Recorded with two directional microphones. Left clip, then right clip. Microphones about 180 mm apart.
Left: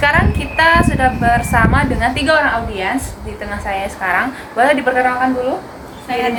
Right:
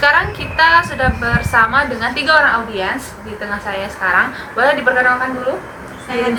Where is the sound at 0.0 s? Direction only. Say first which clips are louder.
Right 1 dB; 30° left (ahead or behind).